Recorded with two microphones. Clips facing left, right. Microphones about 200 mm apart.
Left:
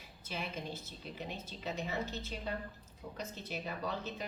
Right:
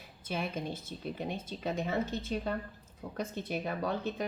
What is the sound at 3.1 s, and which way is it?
A woman's voice, 55° right (ahead or behind).